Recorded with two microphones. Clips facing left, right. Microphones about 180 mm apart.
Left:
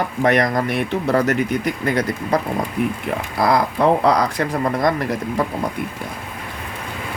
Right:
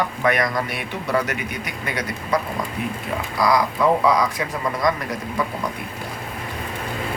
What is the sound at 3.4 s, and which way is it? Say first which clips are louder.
Speech: left 2 dB; 55° left (ahead or behind).